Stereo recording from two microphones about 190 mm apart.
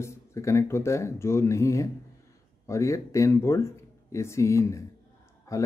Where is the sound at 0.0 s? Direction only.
15° left (ahead or behind).